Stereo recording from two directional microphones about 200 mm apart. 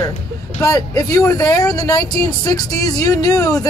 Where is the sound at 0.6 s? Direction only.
15° left (ahead or behind).